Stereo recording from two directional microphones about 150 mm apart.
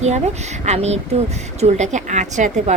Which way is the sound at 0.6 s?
45° right (ahead or behind).